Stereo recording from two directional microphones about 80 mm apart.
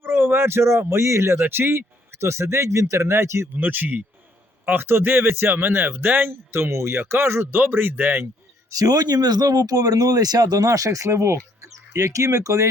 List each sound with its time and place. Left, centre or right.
0.0 s speech: right
3.6 s speech: right
8.8 s speech: right